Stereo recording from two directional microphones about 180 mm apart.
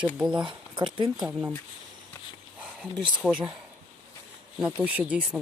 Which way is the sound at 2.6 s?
5° right (ahead or behind).